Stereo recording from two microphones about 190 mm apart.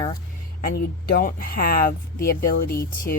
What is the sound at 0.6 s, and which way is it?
Speech, 55° left (ahead or behind).